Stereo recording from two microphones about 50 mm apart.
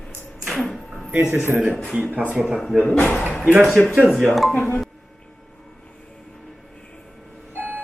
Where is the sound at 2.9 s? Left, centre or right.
Left.